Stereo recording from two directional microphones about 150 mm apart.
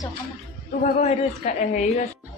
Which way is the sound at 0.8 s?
50° left (ahead or behind).